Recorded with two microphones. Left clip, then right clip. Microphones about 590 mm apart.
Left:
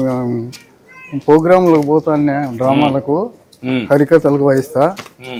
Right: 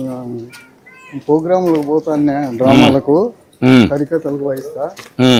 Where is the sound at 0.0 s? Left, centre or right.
Left.